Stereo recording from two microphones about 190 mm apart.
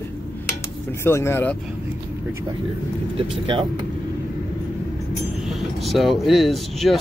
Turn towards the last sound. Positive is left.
turn(degrees=0)  # may be behind; listen again after turning